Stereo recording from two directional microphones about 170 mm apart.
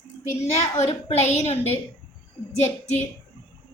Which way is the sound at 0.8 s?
40° left (ahead or behind).